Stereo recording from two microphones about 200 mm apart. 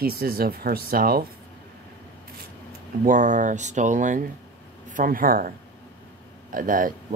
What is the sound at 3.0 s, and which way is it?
Speech, 40° right (ahead or behind).